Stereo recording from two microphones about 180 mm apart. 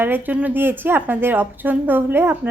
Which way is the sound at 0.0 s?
10° right (ahead or behind).